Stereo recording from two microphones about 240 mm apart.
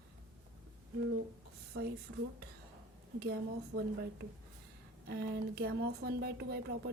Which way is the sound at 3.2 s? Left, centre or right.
Right.